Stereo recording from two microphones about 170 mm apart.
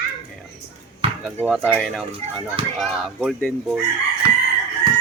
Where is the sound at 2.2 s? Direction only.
40° right (ahead or behind).